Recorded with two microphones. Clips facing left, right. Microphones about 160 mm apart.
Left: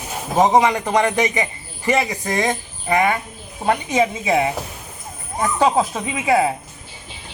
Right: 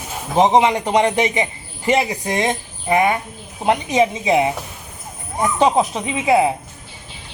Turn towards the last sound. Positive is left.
turn(degrees=-20)  # may be behind; listen again after turning